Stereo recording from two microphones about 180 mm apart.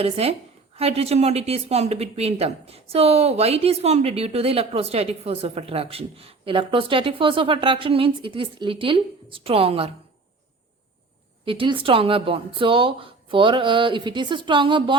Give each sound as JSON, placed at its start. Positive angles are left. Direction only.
{"t": 0.0, "sound": "a woman's voice", "side_deg": -35}
{"t": 11.4, "sound": "speech", "side_deg": -30}